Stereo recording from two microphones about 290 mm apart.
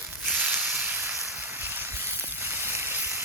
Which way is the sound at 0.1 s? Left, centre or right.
Centre.